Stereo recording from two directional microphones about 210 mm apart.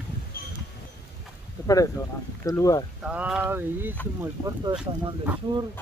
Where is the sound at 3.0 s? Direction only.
5° right (ahead or behind).